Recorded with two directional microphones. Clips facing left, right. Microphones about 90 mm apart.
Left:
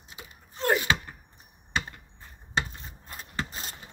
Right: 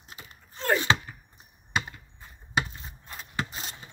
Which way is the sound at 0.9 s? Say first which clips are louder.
Right 2 dB; 25° right (ahead or behind).